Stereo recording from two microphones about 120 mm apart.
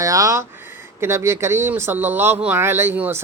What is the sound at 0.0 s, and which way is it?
Speech, 25° right (ahead or behind).